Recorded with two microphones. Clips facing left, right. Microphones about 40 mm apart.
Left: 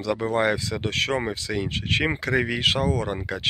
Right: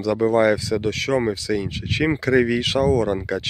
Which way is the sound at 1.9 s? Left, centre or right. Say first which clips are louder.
Right 3 dB; left.